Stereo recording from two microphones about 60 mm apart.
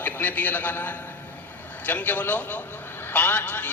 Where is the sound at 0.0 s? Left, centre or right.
Left.